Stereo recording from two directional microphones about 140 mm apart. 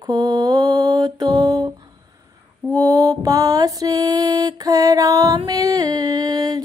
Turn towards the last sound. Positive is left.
turn(degrees=-30)  # may be behind; listen again after turning